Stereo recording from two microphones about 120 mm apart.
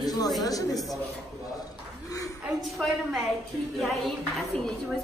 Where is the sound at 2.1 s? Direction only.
30° left (ahead or behind).